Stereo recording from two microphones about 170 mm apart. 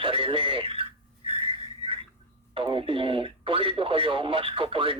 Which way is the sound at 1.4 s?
35° right (ahead or behind).